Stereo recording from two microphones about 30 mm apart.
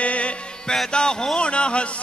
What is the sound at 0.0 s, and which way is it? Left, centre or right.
Music, left.